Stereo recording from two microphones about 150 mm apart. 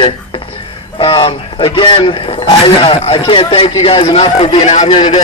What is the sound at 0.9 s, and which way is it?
Speech, 30° left (ahead or behind).